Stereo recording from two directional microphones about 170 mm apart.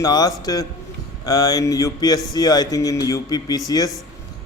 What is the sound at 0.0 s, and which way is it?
A man's voice, 20° left (ahead or behind).